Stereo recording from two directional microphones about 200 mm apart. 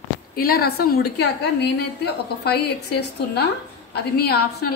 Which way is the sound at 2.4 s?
55° left (ahead or behind).